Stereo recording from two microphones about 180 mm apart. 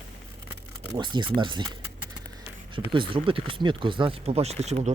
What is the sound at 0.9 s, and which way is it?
Speech, 25° right (ahead or behind).